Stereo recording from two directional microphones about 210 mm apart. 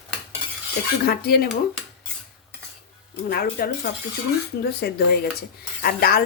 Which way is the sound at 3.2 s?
45° left (ahead or behind).